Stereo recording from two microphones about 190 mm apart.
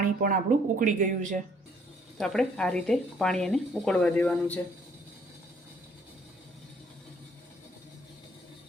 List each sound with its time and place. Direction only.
0.0 s a woman's voice: 45° right (ahead or behind)
2.1 s speech: 5° left (ahead or behind)